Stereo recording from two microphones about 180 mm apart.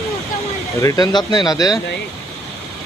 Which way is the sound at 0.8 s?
20° left (ahead or behind).